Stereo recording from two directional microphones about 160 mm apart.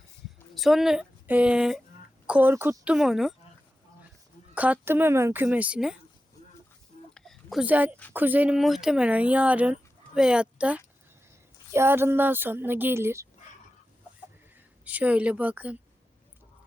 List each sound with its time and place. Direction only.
0.5 s speech: centre (ahead or behind)
4.5 s speech: 10° right (ahead or behind)
7.1 s a sound: 5° left (ahead or behind)
7.6 s speech: 10° right (ahead or behind)
14.5 s speech: 10° right (ahead or behind)